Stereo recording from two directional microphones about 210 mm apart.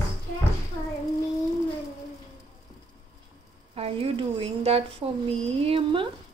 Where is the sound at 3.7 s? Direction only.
25° right (ahead or behind).